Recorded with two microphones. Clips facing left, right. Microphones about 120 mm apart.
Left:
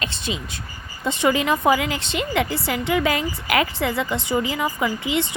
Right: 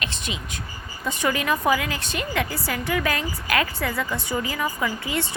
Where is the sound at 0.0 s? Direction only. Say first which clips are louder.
Left 4 dB; 30° left (ahead or behind).